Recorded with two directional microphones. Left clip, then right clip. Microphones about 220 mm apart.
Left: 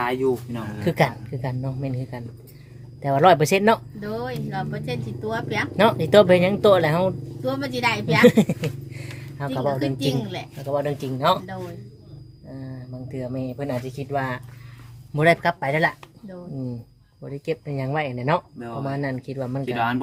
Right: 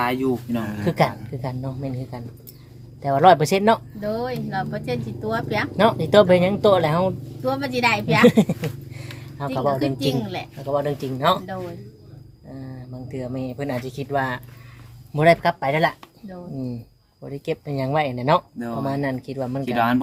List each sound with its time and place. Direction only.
0.0 s speech: 50° right (ahead or behind)
0.9 s speech: 10° left (ahead or behind)
4.0 s a woman's voice: centre (ahead or behind)
5.7 s speech: 15° left (ahead or behind)
7.4 s a woman's voice: 5° right (ahead or behind)
13.1 s a woman's voice: 15° right (ahead or behind)
17.2 s a woman's voice: 5° right (ahead or behind)
19.7 s speech: 45° right (ahead or behind)